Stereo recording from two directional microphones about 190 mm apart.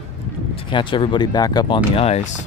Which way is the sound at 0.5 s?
25° left (ahead or behind).